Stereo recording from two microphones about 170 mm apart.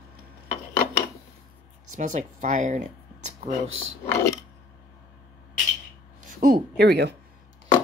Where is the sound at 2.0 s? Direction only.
45° right (ahead or behind).